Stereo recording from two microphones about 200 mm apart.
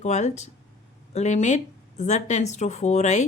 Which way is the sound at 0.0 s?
35° left (ahead or behind).